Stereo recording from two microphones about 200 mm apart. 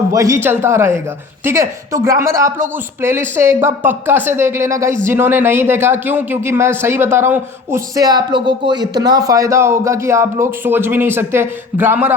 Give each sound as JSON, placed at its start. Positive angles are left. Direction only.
{"t": 0.1, "sound": "speech", "side_deg": -15}